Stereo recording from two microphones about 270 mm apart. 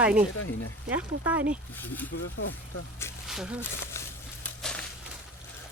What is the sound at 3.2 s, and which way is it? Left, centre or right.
Speech, centre.